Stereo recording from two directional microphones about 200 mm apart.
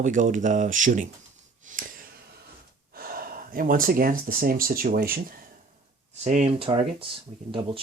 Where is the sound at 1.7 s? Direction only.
40° right (ahead or behind).